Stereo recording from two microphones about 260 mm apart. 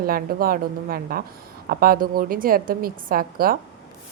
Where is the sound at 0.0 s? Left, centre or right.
Right.